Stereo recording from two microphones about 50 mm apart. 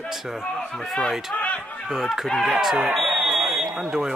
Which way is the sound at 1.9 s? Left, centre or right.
Centre.